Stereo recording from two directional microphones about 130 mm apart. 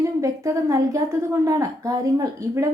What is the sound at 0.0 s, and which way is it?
A woman's voice, 25° right (ahead or behind).